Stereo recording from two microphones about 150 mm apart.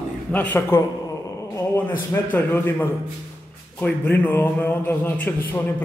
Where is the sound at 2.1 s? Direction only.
15° left (ahead or behind).